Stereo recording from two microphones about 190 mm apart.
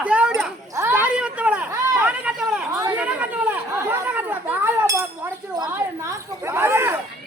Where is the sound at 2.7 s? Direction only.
15° right (ahead or behind).